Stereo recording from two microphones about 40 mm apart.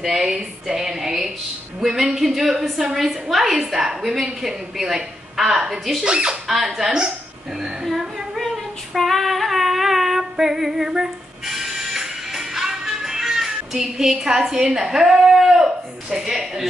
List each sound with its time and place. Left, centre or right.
0.0 s a sound: centre
1.8 s a woman's voice: centre
6.0 s speech: right
6.4 s a woman's voice: centre
8.4 s female singing: centre
10.9 s music: centre